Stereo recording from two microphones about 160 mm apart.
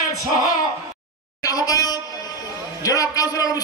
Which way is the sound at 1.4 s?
20° left (ahead or behind).